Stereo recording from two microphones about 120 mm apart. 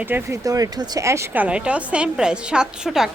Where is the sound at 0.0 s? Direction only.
15° right (ahead or behind).